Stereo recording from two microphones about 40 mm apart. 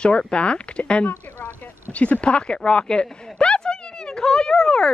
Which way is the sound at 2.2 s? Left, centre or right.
Left.